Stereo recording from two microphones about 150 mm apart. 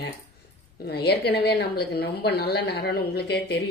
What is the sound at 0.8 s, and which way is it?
A woman's voice, 90° left.